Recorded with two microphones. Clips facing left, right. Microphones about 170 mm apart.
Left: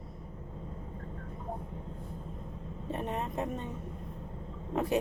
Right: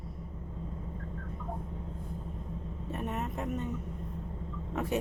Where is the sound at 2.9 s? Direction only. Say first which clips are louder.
Left 1 dB; 25° left (ahead or behind).